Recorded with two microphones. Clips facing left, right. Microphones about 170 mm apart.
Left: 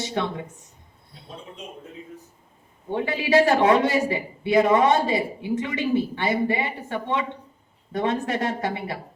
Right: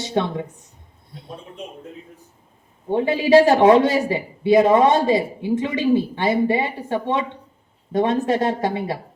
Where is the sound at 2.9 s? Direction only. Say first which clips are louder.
Right 6 dB; 25° right (ahead or behind).